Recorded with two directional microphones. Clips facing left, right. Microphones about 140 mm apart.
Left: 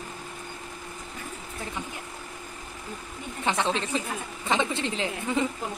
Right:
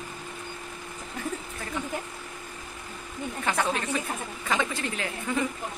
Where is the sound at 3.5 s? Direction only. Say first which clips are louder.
Left 1 dB; 25° left (ahead or behind).